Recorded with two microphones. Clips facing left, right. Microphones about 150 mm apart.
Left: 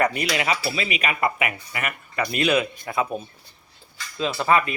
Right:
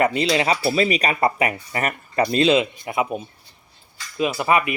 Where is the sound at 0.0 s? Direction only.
25° right (ahead or behind).